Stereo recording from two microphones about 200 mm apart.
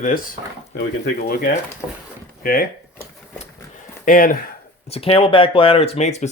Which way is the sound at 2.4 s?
45° left (ahead or behind).